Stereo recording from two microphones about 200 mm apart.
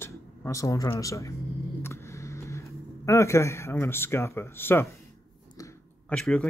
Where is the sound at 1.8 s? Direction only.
15° left (ahead or behind).